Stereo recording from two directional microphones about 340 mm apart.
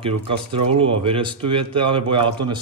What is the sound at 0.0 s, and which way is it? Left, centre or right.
Speech, centre.